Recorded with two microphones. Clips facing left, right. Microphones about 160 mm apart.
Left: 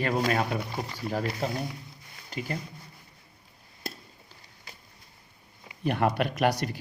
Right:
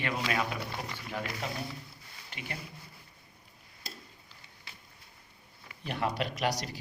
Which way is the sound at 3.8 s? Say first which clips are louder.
Left 8 dB; 55° left (ahead or behind).